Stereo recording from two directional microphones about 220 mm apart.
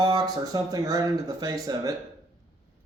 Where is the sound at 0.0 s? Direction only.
15° right (ahead or behind).